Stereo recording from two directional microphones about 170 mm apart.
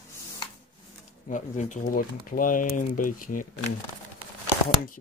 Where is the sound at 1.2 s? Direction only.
45° left (ahead or behind).